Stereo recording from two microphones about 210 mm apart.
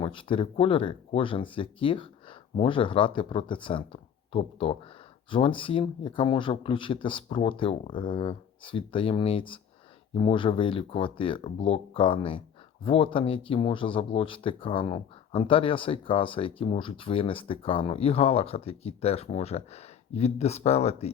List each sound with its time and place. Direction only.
0.0 s speech: 25° left (ahead or behind)